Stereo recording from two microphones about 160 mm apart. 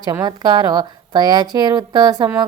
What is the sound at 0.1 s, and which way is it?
Speech, 25° right (ahead or behind).